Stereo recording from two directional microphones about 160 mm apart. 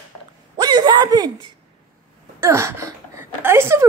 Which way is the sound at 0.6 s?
25° right (ahead or behind).